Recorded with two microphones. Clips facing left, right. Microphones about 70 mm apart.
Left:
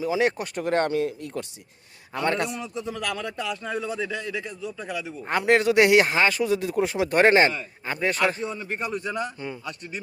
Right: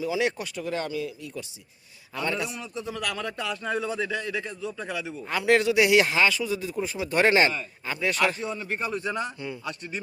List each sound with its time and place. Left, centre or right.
0.0 s speech: left
2.7 s a man's voice: left
3.2 s a man's voice: centre
5.2 s speech: left
7.2 s speech: left
8.5 s a man's voice: centre
9.4 s speech: left